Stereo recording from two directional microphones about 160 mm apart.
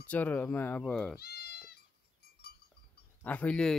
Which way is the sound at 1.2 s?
80° left.